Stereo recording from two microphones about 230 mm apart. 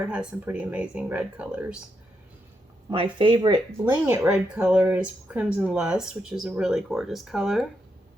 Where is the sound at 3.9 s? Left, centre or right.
Centre.